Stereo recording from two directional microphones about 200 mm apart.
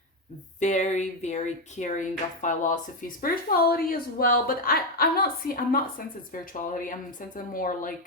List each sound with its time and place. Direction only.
0.6 s speech: 35° left (ahead or behind)